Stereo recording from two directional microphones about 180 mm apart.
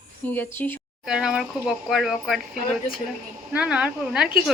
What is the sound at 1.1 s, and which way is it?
Speech, 5° right (ahead or behind).